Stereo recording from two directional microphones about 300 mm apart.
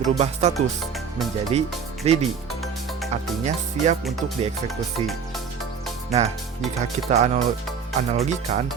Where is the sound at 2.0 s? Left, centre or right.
Right.